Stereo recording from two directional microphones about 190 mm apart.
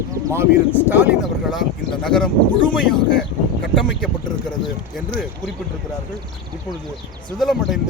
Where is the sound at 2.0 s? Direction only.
5° left (ahead or behind).